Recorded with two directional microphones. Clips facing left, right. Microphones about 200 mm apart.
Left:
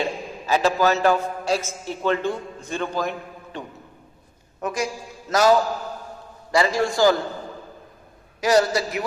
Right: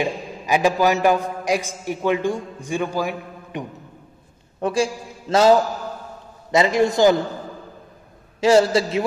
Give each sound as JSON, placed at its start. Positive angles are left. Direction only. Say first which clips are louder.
{"t": 0.0, "sound": "a man's voice", "louder": "right 2 dB", "side_deg": -15}
{"t": 4.6, "sound": "a man's voice", "louder": "right 5 dB", "side_deg": -30}
{"t": 8.4, "sound": "a man's voice", "louder": "right 4 dB", "side_deg": -25}